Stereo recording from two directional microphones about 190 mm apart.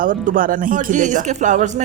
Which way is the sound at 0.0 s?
45° right (ahead or behind).